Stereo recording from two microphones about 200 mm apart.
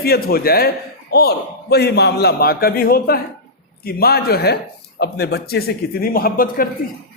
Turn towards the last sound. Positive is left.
turn(degrees=45)  # may be behind; listen again after turning